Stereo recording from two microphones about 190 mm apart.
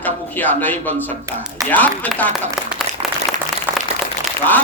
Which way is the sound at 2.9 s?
40° right (ahead or behind).